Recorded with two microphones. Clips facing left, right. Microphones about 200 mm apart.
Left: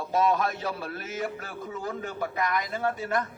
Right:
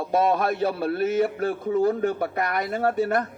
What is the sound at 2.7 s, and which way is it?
Speech, 40° right (ahead or behind).